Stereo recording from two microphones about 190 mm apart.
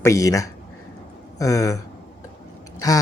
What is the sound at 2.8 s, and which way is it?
Speech, 20° left (ahead or behind).